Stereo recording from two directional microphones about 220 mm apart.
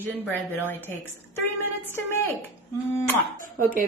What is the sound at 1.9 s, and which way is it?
A woman's voice, 10° left (ahead or behind).